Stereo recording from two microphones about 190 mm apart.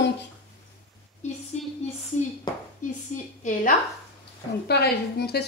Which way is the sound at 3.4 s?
40° left (ahead or behind).